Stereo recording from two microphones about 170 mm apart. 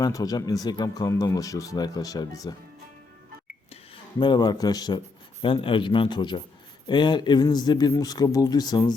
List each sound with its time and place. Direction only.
0.0 s speech: 20° left (ahead or behind)
4.2 s speech: 25° left (ahead or behind)